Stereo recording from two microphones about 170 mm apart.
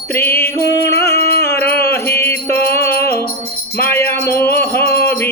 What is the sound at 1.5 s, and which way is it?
Mantra, 15° left (ahead or behind).